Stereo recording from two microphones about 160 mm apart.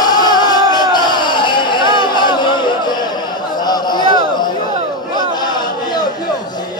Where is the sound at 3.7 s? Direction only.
25° left (ahead or behind).